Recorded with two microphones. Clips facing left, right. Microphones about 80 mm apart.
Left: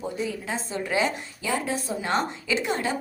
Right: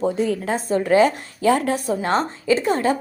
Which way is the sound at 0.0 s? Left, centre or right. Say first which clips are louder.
Right 9 dB; right.